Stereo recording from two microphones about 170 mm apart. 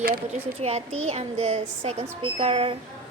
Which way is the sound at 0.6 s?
40° right (ahead or behind).